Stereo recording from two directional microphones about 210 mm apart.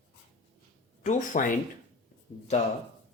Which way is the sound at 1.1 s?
40° left (ahead or behind).